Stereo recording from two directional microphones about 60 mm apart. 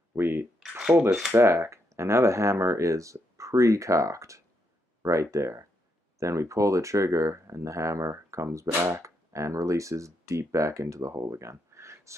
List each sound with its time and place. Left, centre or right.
0.1 s speech: right
0.6 s speech: centre
1.3 s speech: right